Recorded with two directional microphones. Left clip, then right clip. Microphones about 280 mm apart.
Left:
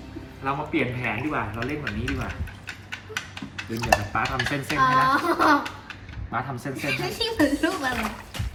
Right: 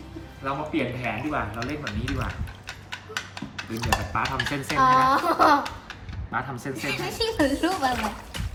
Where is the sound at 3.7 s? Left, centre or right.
Centre.